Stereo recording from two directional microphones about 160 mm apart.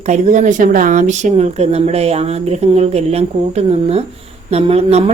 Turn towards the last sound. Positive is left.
turn(degrees=-40)  # may be behind; listen again after turning